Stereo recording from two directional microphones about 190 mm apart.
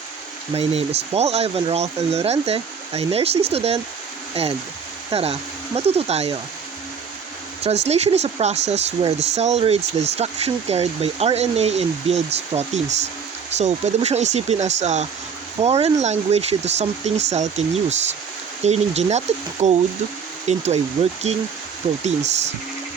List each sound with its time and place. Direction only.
0.5 s speech: 30° right (ahead or behind)
7.6 s speech: 35° right (ahead or behind)